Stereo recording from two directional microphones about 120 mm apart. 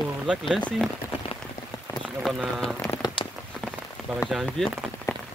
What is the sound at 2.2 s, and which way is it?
Speech, centre (ahead or behind).